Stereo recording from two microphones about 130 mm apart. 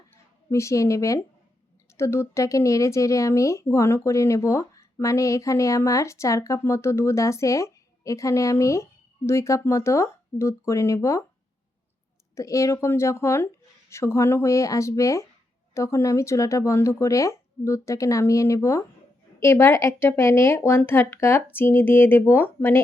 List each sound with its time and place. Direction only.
0.5 s speech: 25° left (ahead or behind)
12.3 s speech: 25° left (ahead or behind)